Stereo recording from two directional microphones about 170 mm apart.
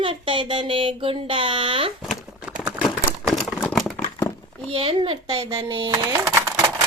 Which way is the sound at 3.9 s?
15° left (ahead or behind).